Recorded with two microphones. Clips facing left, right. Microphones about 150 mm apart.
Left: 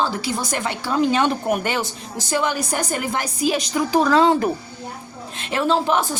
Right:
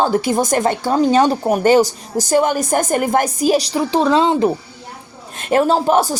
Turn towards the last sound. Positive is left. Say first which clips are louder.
# right 5 dB
turn(degrees=-40)  # may be behind; listen again after turning